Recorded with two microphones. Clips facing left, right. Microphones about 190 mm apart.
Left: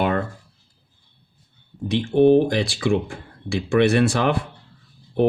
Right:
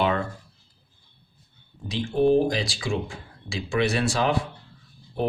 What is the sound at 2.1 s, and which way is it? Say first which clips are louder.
Speech: left 5 dB; 60° left (ahead or behind).